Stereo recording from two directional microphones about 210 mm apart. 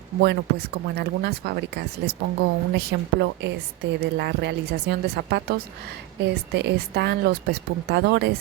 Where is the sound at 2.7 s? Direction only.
50° right (ahead or behind).